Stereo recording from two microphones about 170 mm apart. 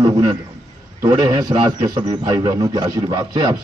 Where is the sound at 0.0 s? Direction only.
20° right (ahead or behind).